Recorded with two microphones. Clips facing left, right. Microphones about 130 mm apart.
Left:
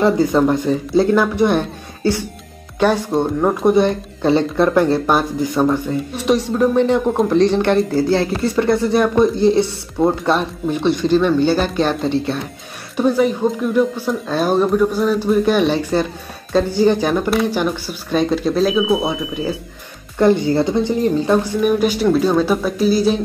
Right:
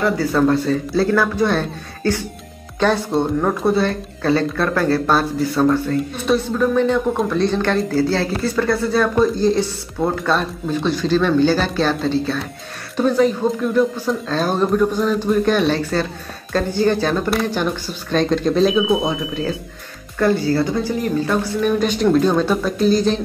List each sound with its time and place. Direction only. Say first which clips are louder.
0.0 s speech: left 3 dB; 20° left (ahead or behind)
20.2 s speech: left 3 dB; 20° left (ahead or behind)
21.5 s speech: left 2 dB; 10° left (ahead or behind)